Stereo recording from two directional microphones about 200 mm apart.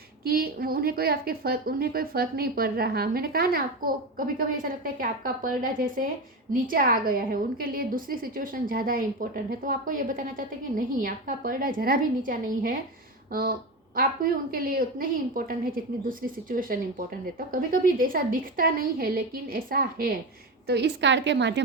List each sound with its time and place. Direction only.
0.3 s a woman's voice: 50° right (ahead or behind)
13.9 s a woman's voice: 45° right (ahead or behind)
20.7 s a woman's voice: 55° right (ahead or behind)